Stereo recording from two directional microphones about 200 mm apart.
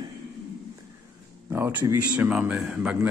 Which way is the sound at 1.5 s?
10° right (ahead or behind).